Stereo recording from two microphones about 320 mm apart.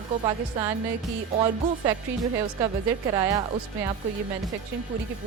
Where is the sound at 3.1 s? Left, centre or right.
Centre.